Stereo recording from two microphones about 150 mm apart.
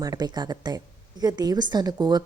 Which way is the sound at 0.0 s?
25° right (ahead or behind).